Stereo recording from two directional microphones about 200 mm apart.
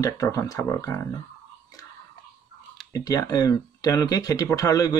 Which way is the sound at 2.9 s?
20° left (ahead or behind).